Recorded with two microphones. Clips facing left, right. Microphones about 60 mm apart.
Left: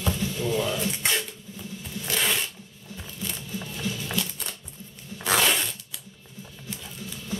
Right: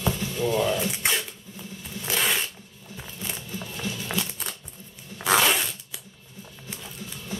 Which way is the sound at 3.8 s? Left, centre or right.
Right.